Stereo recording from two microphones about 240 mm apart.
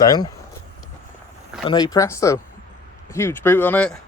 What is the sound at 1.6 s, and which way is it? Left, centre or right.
Speech, centre.